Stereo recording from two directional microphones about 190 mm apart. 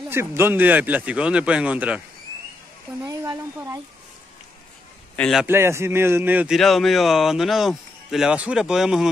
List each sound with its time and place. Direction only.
0.1 s speech: 15° right (ahead or behind)
3.1 s speech: 20° right (ahead or behind)
5.1 s a man's voice: 5° left (ahead or behind)
5.4 s speech: 10° right (ahead or behind)